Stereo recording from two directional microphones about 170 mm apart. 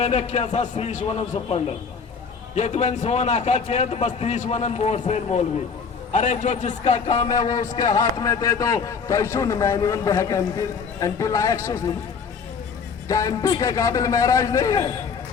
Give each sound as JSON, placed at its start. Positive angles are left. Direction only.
{"t": 0.0, "sound": "a man's voice", "side_deg": 40}
{"t": 7.3, "sound": "a man's voice", "side_deg": 25}
{"t": 7.6, "sound": "a man's voice", "side_deg": 45}
{"t": 7.9, "sound": "a man's voice", "side_deg": 20}
{"t": 13.1, "sound": "a man's voice", "side_deg": 20}